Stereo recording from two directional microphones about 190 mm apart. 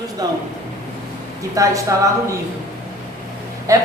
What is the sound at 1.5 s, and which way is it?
Speech, 15° right (ahead or behind).